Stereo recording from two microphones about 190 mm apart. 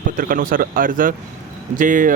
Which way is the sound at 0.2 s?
45° right (ahead or behind).